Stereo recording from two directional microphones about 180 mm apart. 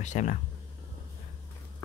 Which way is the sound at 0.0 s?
40° left (ahead or behind).